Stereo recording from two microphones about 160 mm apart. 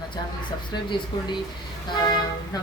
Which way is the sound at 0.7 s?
30° left (ahead or behind).